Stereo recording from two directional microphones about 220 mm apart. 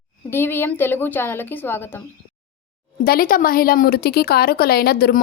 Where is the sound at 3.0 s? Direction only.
40° left (ahead or behind).